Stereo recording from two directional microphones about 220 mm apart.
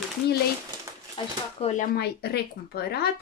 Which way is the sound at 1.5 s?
35° left (ahead or behind).